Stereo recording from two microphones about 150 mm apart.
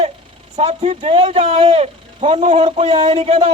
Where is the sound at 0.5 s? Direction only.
45° right (ahead or behind).